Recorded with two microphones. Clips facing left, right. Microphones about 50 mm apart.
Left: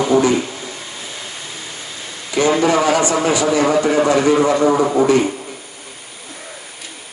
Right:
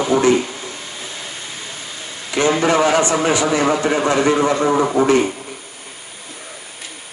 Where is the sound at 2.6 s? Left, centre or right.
Right.